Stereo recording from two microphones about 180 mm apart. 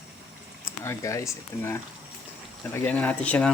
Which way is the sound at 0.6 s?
15° left (ahead or behind).